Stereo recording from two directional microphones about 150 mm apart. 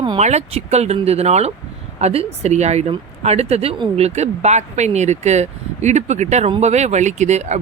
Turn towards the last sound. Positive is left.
turn(degrees=-50)  # may be behind; listen again after turning